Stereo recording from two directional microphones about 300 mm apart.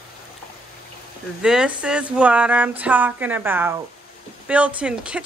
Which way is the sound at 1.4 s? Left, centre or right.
Centre.